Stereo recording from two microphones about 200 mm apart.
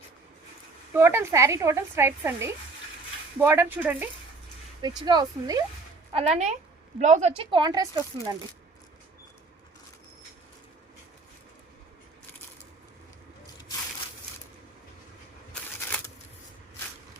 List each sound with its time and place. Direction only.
0.9 s a woman's voice: 10° right (ahead or behind)
4.8 s speech: 20° right (ahead or behind)
6.1 s a woman's voice: 30° right (ahead or behind)